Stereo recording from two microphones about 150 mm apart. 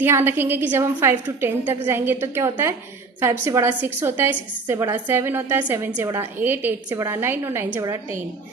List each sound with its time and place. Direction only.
0.0 s a woman's voice: 15° right (ahead or behind)